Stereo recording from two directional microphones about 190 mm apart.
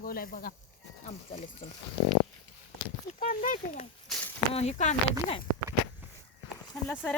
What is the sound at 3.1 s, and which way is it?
Speech, 40° left (ahead or behind).